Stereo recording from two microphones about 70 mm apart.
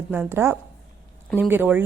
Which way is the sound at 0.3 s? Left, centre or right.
Right.